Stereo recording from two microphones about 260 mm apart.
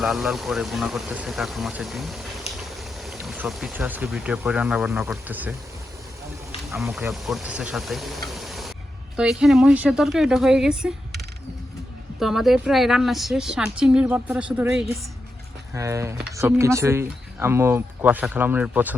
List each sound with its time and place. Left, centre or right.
0.0 s a woman's voice: centre
6.9 s a woman's voice: centre
12.2 s a woman's voice: centre